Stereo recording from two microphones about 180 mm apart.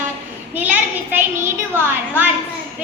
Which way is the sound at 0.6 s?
10° right (ahead or behind).